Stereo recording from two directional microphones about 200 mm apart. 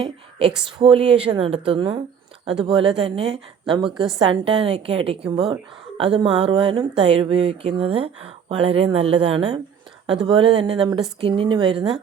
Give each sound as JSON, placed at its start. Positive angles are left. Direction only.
{"t": 0.0, "sound": "speech", "side_deg": -30}